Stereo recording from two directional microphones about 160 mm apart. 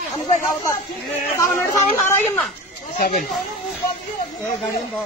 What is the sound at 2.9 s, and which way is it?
Speech, 65° left (ahead or behind).